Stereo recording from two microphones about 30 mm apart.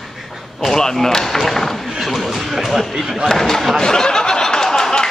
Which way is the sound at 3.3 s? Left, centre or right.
Centre.